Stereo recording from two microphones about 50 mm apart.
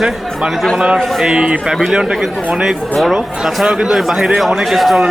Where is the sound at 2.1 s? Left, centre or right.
Centre.